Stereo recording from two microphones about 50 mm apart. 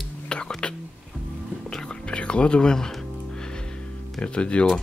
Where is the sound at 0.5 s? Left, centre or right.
Centre.